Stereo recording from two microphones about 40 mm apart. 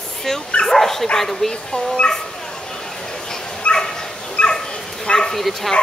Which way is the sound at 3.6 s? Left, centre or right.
Left.